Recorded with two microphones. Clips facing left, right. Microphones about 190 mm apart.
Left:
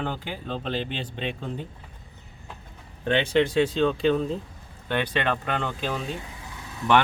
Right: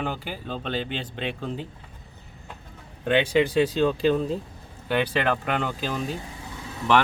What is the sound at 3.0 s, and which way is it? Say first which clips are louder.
Speech: right 1 dB; 5° right (ahead or behind).